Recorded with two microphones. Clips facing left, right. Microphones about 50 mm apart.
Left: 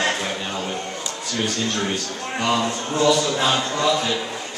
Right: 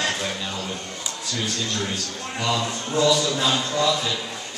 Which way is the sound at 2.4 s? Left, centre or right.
Left.